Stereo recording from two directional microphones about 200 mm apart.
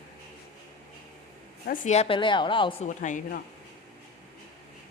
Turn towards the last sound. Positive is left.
turn(degrees=40)  # may be behind; listen again after turning